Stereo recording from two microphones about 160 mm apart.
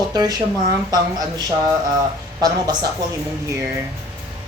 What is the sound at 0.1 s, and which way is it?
Speech, 25° right (ahead or behind).